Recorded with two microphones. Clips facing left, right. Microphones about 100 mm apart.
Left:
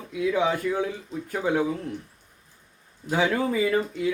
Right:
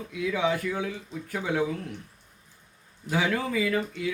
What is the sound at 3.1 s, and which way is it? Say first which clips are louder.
Speech: left 3 dB; 25° left (ahead or behind).